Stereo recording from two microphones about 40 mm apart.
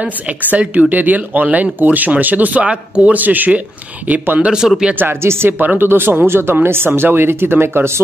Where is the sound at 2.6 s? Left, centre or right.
Right.